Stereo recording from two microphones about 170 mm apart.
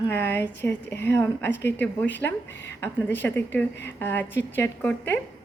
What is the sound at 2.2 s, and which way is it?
Speech, 5° left (ahead or behind).